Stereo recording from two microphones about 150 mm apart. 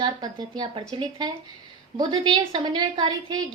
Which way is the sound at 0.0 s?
30° right (ahead or behind).